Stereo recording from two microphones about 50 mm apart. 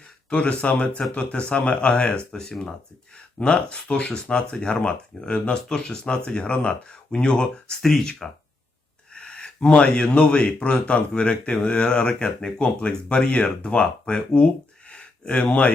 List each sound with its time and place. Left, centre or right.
0.3 s speech: left
2.3 s speech: centre
7.8 s speech: centre
9.1 s speech: centre
14.8 s a sound: left